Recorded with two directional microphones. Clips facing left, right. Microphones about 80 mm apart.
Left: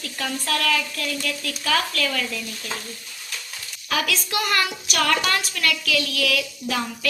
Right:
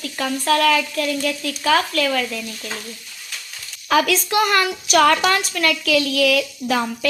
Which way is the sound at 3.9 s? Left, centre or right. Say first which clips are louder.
Right 8 dB; right.